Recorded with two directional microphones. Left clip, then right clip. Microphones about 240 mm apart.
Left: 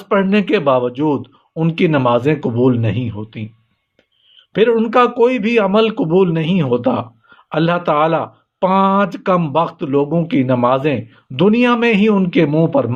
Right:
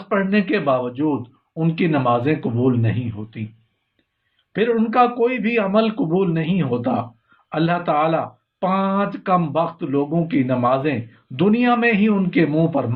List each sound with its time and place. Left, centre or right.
0.1 s speech: left
4.5 s speech: left